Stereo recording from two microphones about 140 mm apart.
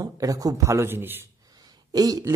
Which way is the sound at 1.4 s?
25° right (ahead or behind).